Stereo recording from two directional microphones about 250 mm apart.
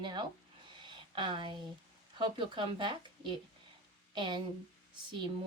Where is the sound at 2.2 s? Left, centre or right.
Centre.